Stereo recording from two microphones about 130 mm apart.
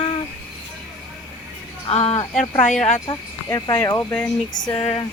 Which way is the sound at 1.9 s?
50° left (ahead or behind).